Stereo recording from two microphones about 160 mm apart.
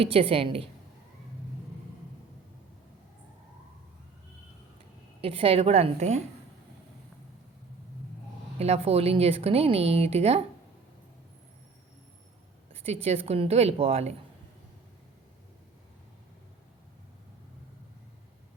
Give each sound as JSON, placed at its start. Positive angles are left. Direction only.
{"t": 0.0, "sound": "speech", "side_deg": -35}
{"t": 5.2, "sound": "speech", "side_deg": -35}
{"t": 8.5, "sound": "speech", "side_deg": -40}
{"t": 12.7, "sound": "speech", "side_deg": -40}